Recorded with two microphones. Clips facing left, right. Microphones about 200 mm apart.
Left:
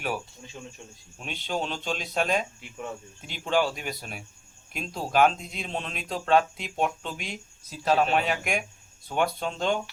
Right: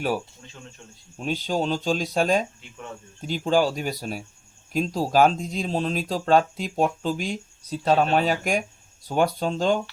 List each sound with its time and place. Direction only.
1.2 s speech: 40° right (ahead or behind)